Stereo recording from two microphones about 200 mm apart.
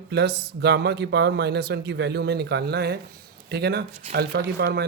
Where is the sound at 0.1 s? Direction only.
55° right (ahead or behind).